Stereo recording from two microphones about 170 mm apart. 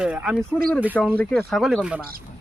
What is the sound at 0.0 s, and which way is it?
Speech, 5° right (ahead or behind).